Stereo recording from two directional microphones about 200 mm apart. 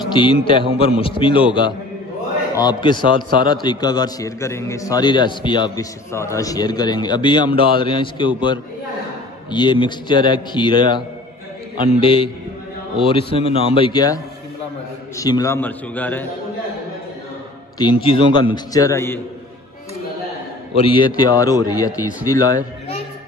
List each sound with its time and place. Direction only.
0.1 s a man's voice: 25° left (ahead or behind)
2.5 s a man's voice: 20° left (ahead or behind)
9.5 s a man's voice: 20° left (ahead or behind)
13.3 s a man's voice: 30° left (ahead or behind); by 16.3 s 10° left (ahead or behind)
17.7 s a man's voice: 25° left (ahead or behind)
20.7 s a man's voice: 25° left (ahead or behind)